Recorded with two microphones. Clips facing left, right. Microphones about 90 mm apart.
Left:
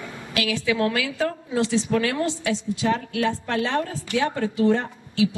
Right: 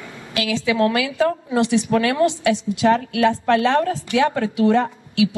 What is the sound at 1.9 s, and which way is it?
A woman's voice, 60° right (ahead or behind).